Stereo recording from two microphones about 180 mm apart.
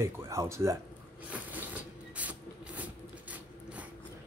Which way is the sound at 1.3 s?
10° right (ahead or behind).